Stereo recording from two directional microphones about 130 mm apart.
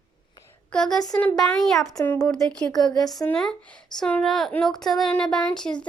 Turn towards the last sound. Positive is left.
turn(degrees=5)  # may be behind; listen again after turning